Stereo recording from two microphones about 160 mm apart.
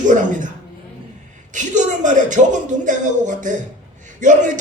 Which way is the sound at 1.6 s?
50° right (ahead or behind).